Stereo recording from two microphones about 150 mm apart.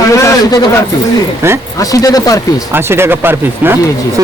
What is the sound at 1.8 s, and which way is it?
Speech, 25° left (ahead or behind).